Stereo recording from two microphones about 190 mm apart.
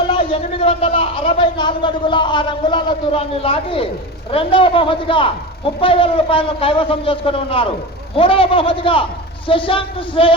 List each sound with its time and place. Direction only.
0.1 s a man's voice: 30° left (ahead or behind)